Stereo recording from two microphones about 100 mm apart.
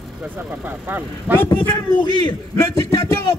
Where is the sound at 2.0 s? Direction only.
50° left (ahead or behind).